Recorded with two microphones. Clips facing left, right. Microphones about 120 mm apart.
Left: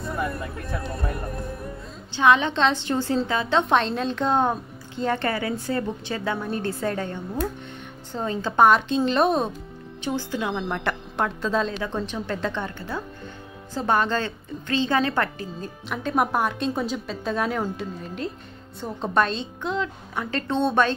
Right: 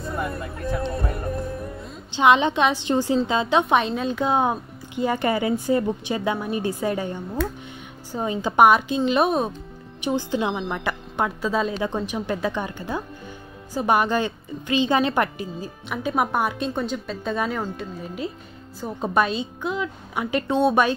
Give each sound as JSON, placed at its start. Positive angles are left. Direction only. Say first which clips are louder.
{"t": 0.3, "sound": "speech", "louder": "right 3 dB", "side_deg": -25}
{"t": 2.0, "sound": "a woman's voice", "louder": "right 2 dB", "side_deg": -20}
{"t": 3.6, "sound": "a woman's voice", "louder": "right 1 dB", "side_deg": -5}
{"t": 10.7, "sound": "a woman's voice", "louder": "even", "side_deg": 0}
{"t": 15.6, "sound": "a woman's voice", "louder": "right 1 dB", "side_deg": -5}